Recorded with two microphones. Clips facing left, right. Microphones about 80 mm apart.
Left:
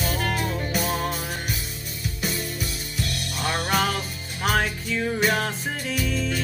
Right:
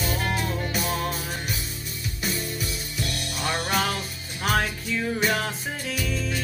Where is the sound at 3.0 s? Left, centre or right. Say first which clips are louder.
Left 1 dB; right.